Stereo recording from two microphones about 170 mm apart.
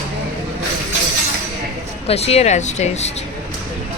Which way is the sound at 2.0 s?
35° left (ahead or behind).